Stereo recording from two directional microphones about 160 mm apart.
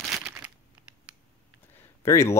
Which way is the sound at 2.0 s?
20° left (ahead or behind).